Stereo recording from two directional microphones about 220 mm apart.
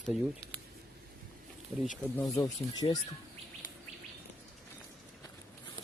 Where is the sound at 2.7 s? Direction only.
15° left (ahead or behind).